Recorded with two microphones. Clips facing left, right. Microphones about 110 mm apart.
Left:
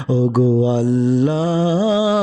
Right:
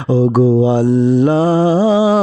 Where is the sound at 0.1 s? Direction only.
65° right (ahead or behind).